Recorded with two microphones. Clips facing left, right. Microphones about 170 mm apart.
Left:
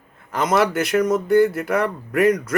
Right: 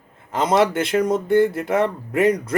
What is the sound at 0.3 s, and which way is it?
Speech, 25° right (ahead or behind).